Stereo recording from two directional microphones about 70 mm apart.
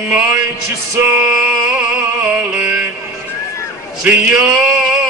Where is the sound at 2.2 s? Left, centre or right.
Right.